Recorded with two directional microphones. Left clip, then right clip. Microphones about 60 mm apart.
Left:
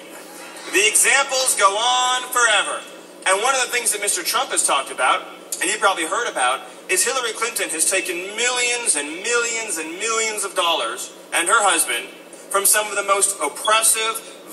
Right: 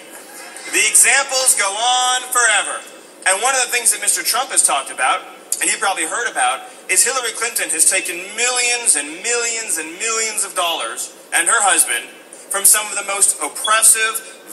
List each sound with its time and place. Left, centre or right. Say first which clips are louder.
0.7 s a man's voice: right 2 dB; right